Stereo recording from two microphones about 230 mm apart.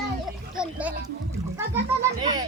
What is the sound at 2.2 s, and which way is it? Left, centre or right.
Children playing, centre.